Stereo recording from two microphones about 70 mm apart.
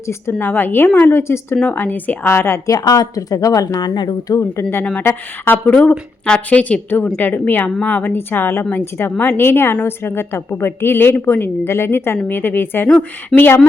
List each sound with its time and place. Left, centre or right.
0.1 s a woman's voice: left
0.4 s a woman's voice: left
2.6 s a woman's voice: left
5.6 s a woman's voice: left